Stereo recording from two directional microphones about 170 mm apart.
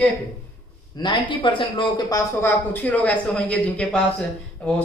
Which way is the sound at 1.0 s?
30° left (ahead or behind).